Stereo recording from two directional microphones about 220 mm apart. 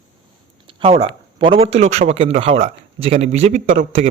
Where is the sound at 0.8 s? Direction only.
25° right (ahead or behind).